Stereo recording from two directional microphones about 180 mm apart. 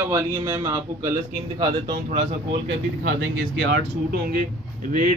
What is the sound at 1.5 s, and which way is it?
Speech, 25° right (ahead or behind).